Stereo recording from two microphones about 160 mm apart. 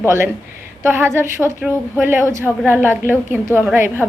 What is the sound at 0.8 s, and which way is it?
A woman's voice, 15° right (ahead or behind).